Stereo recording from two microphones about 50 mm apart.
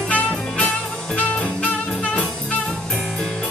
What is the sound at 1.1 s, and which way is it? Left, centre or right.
Music, left.